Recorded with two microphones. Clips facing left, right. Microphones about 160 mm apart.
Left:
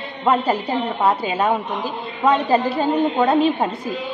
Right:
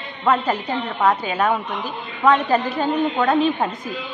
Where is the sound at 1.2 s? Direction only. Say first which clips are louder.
Left 1 dB; 30° left (ahead or behind).